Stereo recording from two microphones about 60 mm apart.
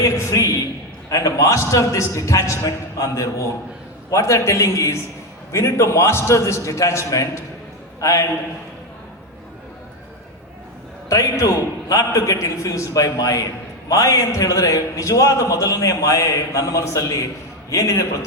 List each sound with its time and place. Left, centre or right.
0.0 s a man's voice: left
1.1 s a man's voice: left
11.1 s a man's voice: left